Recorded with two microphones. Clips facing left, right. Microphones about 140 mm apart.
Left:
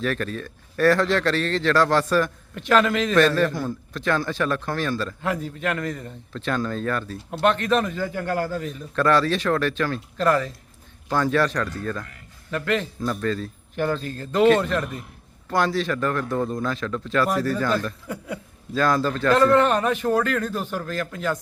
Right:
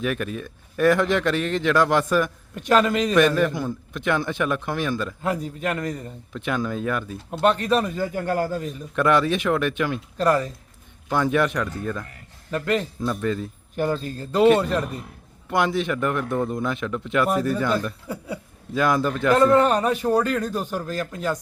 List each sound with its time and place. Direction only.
0.0 s a man's voice: 15° right (ahead or behind)
5.3 s a man's voice: 40° right (ahead or behind)
6.3 s a man's voice: 15° right (ahead or behind)
12.5 s a man's voice: 35° right (ahead or behind)
13.1 s a man's voice: 5° right (ahead or behind)